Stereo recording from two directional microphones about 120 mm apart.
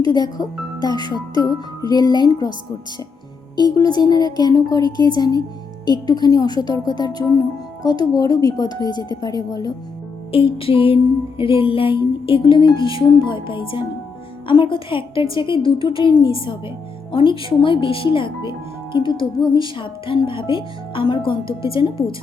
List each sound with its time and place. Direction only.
0.0 s speech: 35° left (ahead or behind)
10.3 s music: 50° left (ahead or behind)